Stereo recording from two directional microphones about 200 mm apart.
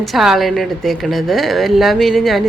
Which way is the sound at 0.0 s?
Centre (ahead or behind).